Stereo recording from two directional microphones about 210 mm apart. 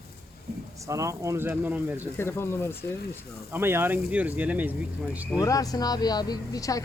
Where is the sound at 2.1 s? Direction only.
10° left (ahead or behind).